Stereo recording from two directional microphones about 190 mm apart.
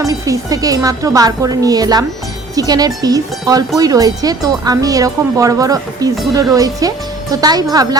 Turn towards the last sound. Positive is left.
turn(degrees=-20)  # may be behind; listen again after turning